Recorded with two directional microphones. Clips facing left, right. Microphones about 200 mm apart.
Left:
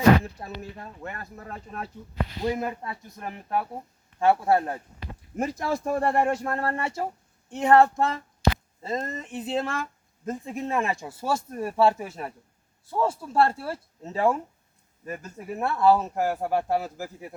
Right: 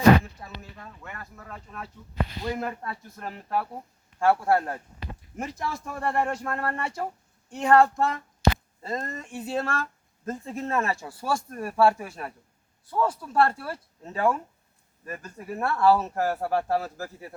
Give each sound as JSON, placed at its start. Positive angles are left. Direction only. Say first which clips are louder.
{"t": 0.3, "sound": "speech", "louder": "left 5 dB", "side_deg": 35}
{"t": 2.4, "sound": "speech", "louder": "left 6 dB", "side_deg": 15}
{"t": 5.8, "sound": "speech", "louder": "left 4 dB", "side_deg": 35}